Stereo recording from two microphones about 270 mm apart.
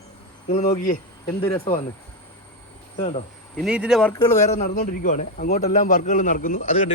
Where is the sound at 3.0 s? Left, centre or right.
Left.